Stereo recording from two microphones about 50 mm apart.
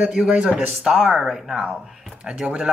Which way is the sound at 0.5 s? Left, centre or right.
Right.